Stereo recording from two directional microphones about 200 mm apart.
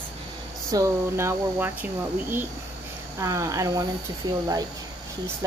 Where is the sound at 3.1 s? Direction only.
15° right (ahead or behind).